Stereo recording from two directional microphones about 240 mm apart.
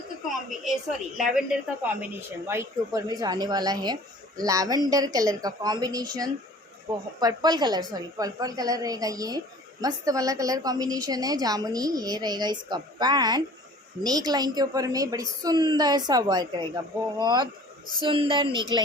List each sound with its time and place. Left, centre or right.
1.1 s a woman's voice: centre